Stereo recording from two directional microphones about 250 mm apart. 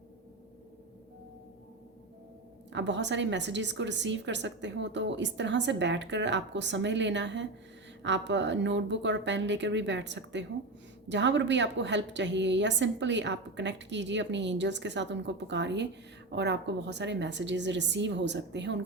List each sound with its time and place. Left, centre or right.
2.7 s a woman's voice: right